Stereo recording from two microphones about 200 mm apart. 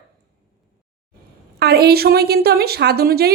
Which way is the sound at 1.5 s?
55° right (ahead or behind).